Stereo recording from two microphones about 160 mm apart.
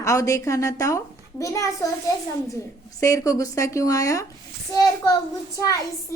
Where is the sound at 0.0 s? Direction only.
20° left (ahead or behind).